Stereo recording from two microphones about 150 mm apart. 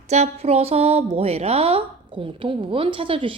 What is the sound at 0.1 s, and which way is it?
A woman's voice, 45° right (ahead or behind).